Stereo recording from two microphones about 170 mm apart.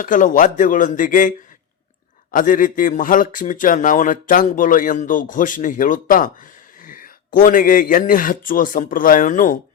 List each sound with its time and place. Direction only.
0.0 s a man's voice: 50° left (ahead or behind)
2.3 s a man's voice: 50° left (ahead or behind)
6.8 s a sound: 50° left (ahead or behind)
7.3 s a man's voice: 55° left (ahead or behind)